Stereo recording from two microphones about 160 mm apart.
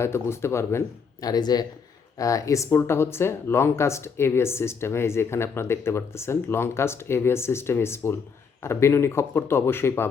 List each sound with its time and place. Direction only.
0.0 s speech: 15° left (ahead or behind)